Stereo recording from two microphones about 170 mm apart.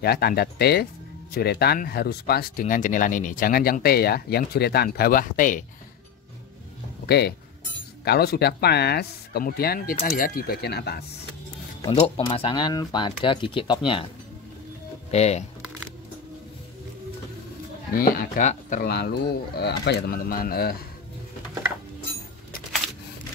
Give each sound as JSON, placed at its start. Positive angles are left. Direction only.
{"t": 0.0, "sound": "speech", "side_deg": 65}
{"t": 7.1, "sound": "speech", "side_deg": 70}
{"t": 11.9, "sound": "speech", "side_deg": 35}
{"t": 15.0, "sound": "speech", "side_deg": 40}
{"t": 17.9, "sound": "speech", "side_deg": 60}
{"t": 18.9, "sound": "speech", "side_deg": 70}